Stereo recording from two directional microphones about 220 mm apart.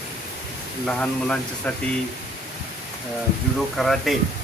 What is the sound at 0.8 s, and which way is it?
Speech, 5° left (ahead or behind).